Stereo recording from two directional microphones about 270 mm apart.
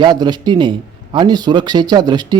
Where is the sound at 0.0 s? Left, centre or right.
Centre.